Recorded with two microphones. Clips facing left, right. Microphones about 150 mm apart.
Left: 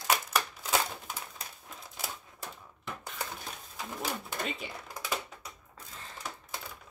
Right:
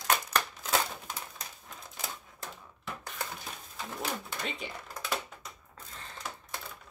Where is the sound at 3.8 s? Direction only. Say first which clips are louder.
Even; 5° left (ahead or behind).